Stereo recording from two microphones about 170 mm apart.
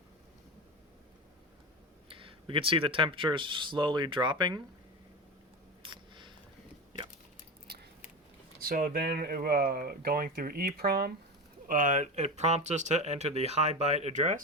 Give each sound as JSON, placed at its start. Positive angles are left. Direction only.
{"t": 2.0, "sound": "speech", "side_deg": -30}
{"t": 5.8, "sound": "a sound", "side_deg": -30}
{"t": 7.7, "sound": "biting", "side_deg": -75}
{"t": 8.6, "sound": "speech", "side_deg": -60}
{"t": 11.7, "sound": "speech", "side_deg": -50}